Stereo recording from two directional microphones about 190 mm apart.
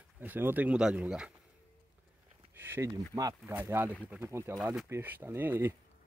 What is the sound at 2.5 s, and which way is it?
Speech, 10° right (ahead or behind).